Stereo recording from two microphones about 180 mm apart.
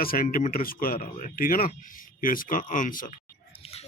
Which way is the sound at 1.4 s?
50° left (ahead or behind).